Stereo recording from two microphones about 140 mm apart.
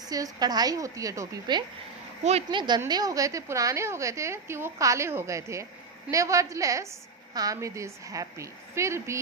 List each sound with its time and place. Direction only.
0.0 s a woman's voice: 25° right (ahead or behind)